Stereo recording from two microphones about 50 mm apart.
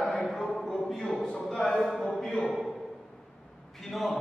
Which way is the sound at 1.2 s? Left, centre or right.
Centre.